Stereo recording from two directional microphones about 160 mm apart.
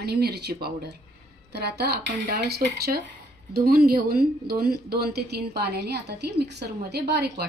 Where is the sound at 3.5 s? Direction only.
70° right (ahead or behind).